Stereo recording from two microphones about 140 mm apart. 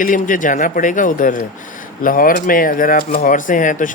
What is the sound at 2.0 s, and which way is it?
Speech, 80° left.